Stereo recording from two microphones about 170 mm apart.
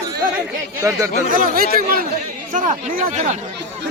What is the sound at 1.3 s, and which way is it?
Speech, 55° right (ahead or behind).